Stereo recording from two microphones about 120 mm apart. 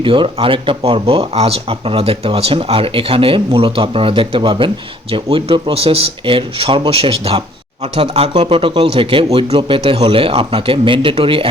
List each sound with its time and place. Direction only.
0.0 s speech: 45° right (ahead or behind)